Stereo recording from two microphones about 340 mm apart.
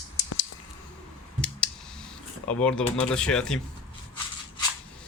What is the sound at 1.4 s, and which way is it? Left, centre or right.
Clicking, centre.